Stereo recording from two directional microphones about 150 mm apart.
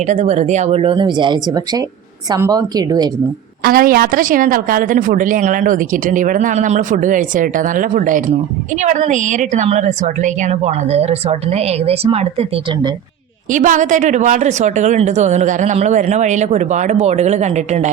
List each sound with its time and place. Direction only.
0.0 s a woman's voice: 50° right (ahead or behind); by 3.1 s 25° right (ahead or behind)
3.6 s speech: 80° right; by 12.5 s 40° right (ahead or behind)
13.5 s speech: 55° right (ahead or behind)